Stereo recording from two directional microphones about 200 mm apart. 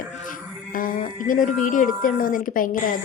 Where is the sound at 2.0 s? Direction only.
45° left (ahead or behind).